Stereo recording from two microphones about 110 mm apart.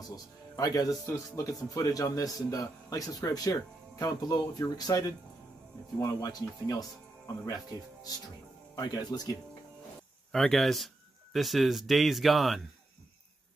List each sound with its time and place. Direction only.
0.1 s speech: 35° left (ahead or behind)
10.3 s speech: centre (ahead or behind)